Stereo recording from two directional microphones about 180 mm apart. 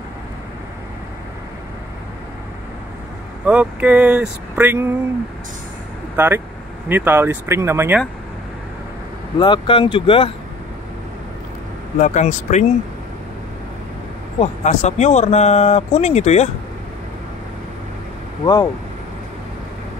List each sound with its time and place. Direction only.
3.4 s speech: 5° right (ahead or behind)
6.1 s speech: 10° right (ahead or behind)
9.4 s speech: 30° left (ahead or behind)
12.0 s speech: 40° left (ahead or behind)
14.4 s speech: 40° left (ahead or behind)
18.4 s speech: 20° left (ahead or behind)